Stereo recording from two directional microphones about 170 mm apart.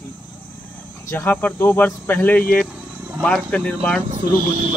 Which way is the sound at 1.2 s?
10° left (ahead or behind).